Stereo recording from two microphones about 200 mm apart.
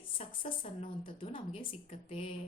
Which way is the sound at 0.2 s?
30° left (ahead or behind).